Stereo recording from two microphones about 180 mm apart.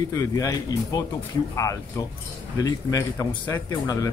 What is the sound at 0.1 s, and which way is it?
Speech, 20° left (ahead or behind).